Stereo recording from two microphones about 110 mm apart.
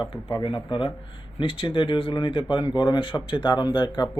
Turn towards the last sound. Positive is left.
turn(degrees=40)  # may be behind; listen again after turning